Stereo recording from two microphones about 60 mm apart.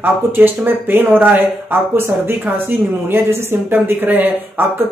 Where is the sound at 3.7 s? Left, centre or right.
Right.